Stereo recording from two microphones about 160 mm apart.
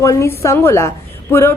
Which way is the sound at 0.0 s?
20° left (ahead or behind).